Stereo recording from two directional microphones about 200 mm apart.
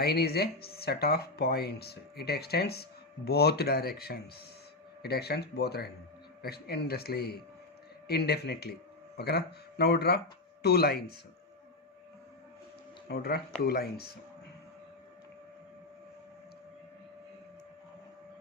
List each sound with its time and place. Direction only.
0.0 s speech: 50° left (ahead or behind)
13.1 s speech: 50° left (ahead or behind)